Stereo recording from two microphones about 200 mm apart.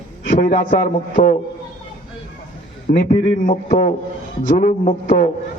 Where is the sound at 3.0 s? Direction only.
40° left (ahead or behind).